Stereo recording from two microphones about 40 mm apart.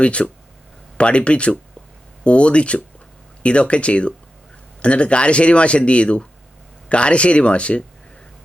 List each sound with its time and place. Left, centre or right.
0.0 s speech: left